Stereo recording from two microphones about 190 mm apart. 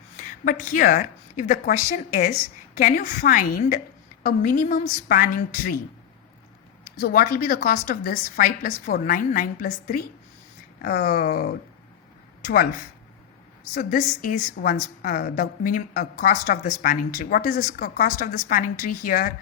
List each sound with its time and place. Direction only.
0.2 s a woman's voice: 45° left (ahead or behind)
6.8 s a woman's voice: 50° left (ahead or behind)
13.7 s a woman's voice: 45° left (ahead or behind)